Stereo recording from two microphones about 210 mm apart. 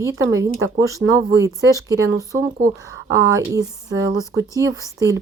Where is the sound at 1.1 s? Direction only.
15° right (ahead or behind).